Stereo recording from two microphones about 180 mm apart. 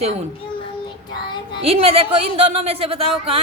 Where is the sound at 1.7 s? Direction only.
35° right (ahead or behind).